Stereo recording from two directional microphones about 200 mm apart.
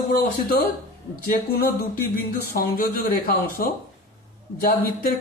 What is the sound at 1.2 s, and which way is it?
Speech, 50° left (ahead or behind).